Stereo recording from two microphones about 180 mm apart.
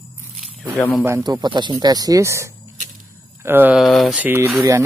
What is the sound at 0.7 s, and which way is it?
Speech, 10° left (ahead or behind).